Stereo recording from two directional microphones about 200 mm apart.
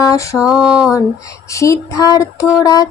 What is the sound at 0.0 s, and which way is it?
Mantra, 15° left (ahead or behind).